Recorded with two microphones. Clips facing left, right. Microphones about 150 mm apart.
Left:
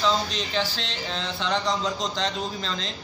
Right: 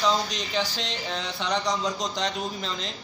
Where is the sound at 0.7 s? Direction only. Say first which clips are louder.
Even; 15° right (ahead or behind).